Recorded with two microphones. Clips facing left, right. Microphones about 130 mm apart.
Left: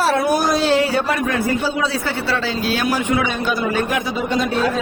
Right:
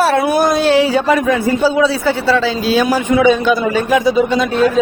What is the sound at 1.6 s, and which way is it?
Speech, 90° right.